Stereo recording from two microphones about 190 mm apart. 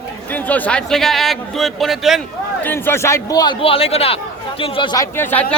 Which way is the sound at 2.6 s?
10° left (ahead or behind).